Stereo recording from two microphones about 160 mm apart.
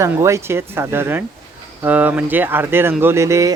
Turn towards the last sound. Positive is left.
turn(degrees=-20)  # may be behind; listen again after turning